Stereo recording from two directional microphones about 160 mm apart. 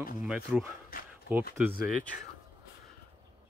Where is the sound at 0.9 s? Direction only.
65° left (ahead or behind).